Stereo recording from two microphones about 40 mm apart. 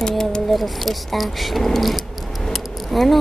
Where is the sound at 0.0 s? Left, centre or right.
Centre.